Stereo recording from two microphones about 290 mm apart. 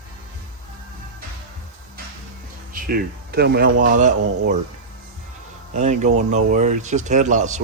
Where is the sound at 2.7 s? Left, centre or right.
Right.